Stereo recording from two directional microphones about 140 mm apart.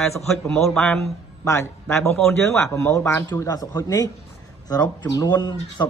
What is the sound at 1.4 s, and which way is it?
Speech, 20° left (ahead or behind).